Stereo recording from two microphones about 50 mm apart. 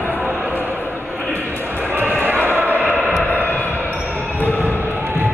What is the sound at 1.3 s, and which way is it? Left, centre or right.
Music, right.